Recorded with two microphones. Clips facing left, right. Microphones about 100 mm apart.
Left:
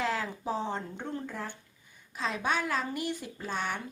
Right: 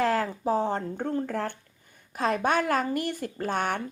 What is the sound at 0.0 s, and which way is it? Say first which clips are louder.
A woman's voice: right 7 dB; 50° right (ahead or behind).